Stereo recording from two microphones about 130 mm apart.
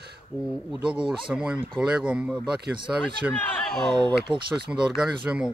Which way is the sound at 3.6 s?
5° left (ahead or behind).